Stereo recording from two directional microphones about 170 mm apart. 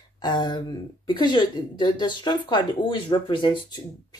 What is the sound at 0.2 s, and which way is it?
Speech, 25° left (ahead or behind).